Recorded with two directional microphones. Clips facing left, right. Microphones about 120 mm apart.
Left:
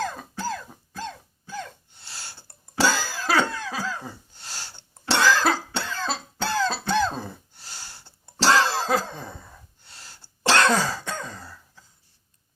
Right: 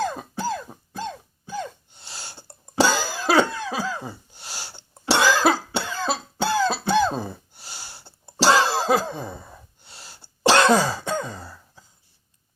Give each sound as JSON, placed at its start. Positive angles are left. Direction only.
{"t": 0.0, "sound": "cough", "side_deg": -20}